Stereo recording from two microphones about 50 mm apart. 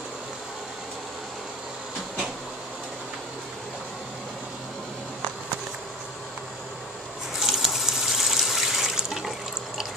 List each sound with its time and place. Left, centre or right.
7.3 s water: centre